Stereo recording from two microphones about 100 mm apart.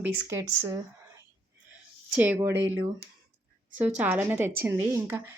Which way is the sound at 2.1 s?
15° right (ahead or behind).